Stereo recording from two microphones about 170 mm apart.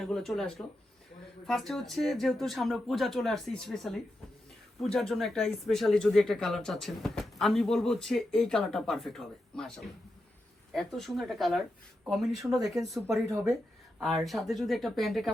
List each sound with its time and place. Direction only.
0.0 s speech: centre (ahead or behind)
13.2 s speech: 20° right (ahead or behind)
14.0 s speech: centre (ahead or behind)